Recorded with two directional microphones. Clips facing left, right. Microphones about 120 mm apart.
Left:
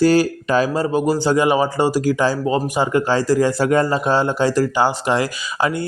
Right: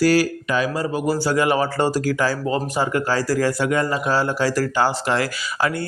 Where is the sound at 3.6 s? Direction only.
30° left (ahead or behind).